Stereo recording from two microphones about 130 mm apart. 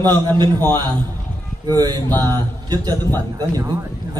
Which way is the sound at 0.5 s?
15° left (ahead or behind).